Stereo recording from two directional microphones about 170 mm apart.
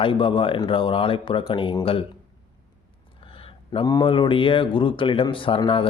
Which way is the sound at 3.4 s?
30° left (ahead or behind).